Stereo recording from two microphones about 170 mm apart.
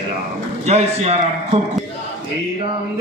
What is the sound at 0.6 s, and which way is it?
Speech, 40° right (ahead or behind).